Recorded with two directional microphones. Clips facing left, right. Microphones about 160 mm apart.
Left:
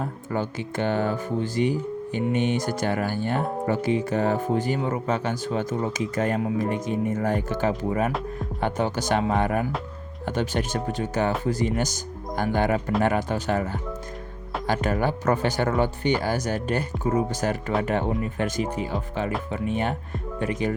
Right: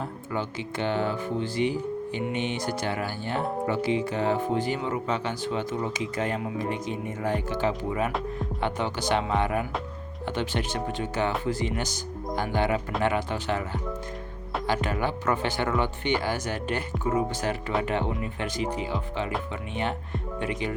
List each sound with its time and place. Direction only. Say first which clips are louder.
0.0 s speech: left 3 dB; 45° left (ahead or behind)
14.7 s speech: left 4 dB; 45° left (ahead or behind)